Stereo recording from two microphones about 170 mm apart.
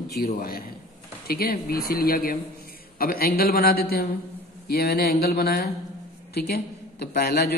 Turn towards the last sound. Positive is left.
turn(degrees=65)  # may be behind; listen again after turning